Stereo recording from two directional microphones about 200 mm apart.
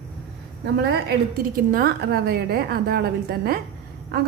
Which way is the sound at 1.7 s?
50° right (ahead or behind).